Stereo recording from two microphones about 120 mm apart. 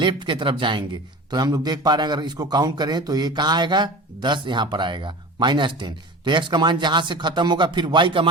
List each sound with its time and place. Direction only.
0.0 s a man's voice: 40° right (ahead or behind)